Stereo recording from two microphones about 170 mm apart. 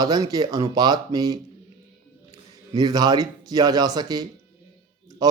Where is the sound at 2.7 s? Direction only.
25° right (ahead or behind).